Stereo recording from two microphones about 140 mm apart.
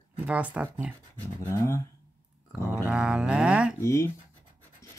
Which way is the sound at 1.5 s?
20° left (ahead or behind).